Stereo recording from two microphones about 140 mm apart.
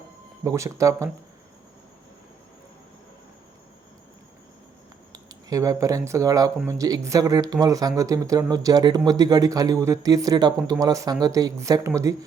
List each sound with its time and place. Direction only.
0.4 s speech: 20° right (ahead or behind)
5.1 s speech: 25° right (ahead or behind)